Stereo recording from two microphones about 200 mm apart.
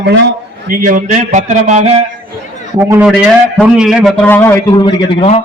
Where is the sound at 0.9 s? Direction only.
40° right (ahead or behind).